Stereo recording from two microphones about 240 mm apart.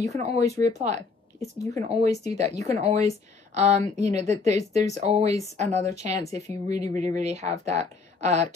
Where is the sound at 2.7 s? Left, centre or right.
Right.